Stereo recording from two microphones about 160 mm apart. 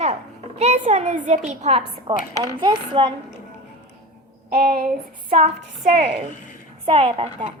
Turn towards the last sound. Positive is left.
turn(degrees=-35)  # may be behind; listen again after turning